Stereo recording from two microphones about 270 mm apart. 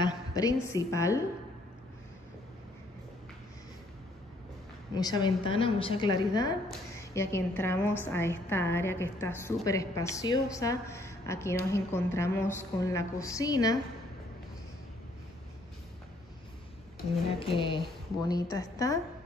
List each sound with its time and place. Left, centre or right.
0.0 s a sound: centre
0.7 s a woman's voice: centre
4.9 s a woman's voice: centre
17.4 s a woman's voice: centre